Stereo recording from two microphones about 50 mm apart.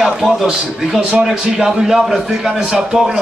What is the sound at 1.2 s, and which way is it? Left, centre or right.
A man's voice, centre.